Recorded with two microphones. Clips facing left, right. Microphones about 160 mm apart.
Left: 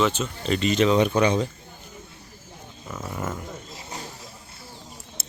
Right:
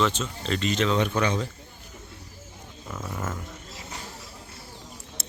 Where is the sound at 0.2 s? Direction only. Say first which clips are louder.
Left 3 dB; 10° left (ahead or behind).